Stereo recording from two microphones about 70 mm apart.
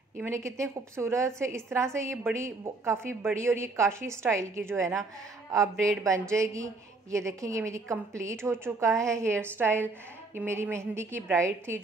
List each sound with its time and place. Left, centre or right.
0.5 s a woman's voice: right
6.0 s a woman's voice: right